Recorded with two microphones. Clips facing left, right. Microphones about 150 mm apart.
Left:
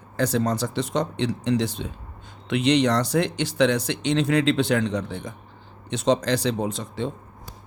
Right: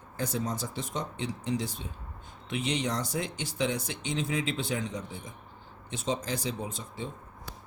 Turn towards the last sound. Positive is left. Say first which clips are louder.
# left 10 dB
turn(degrees=80)